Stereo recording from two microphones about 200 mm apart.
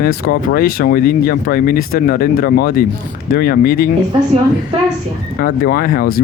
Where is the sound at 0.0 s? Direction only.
50° left (ahead or behind).